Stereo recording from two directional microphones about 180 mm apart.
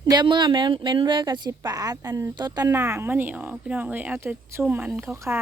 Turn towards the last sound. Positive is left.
turn(degrees=-15)  # may be behind; listen again after turning